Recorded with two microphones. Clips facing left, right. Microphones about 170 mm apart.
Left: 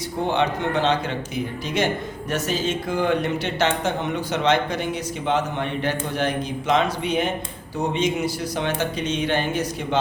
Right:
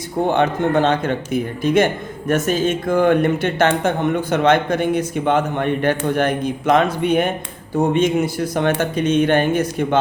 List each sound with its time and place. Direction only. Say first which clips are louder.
0.3 s a man's voice: right 5 dB; 50° right (ahead or behind)